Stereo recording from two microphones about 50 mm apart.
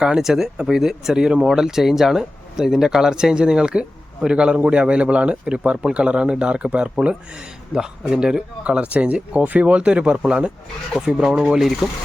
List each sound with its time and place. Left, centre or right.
0.1 s speech: centre
11.4 s speech: centre